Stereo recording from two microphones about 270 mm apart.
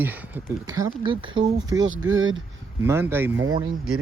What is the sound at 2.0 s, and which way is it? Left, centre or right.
Speech, right.